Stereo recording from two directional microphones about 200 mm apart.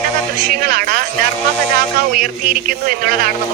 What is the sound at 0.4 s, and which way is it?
Speech, 45° right (ahead or behind).